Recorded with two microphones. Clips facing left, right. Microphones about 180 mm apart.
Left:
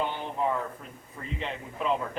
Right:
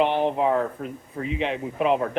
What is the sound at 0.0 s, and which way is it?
Speech, 75° right (ahead or behind).